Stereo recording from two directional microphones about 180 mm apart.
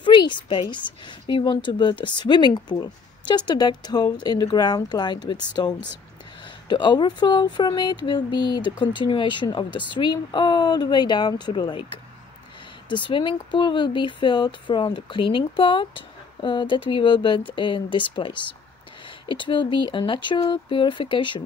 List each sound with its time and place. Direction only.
0.0 s speech: 25° left (ahead or behind)